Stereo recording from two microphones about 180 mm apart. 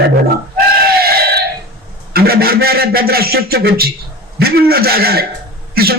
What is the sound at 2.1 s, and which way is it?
A man's voice, 55° right (ahead or behind).